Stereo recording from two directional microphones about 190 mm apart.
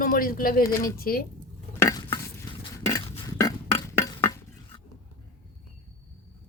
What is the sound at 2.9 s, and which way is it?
Burping, 20° left (ahead or behind).